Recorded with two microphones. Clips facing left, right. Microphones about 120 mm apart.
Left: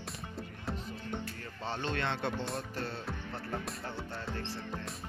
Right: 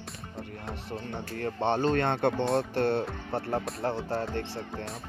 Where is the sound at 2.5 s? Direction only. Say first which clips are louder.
Right 12 dB; 70° right (ahead or behind).